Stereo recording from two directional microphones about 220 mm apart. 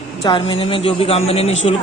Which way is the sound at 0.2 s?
20° left (ahead or behind).